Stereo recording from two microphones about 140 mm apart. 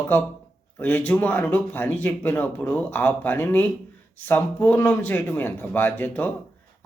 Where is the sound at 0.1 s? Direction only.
15° left (ahead or behind).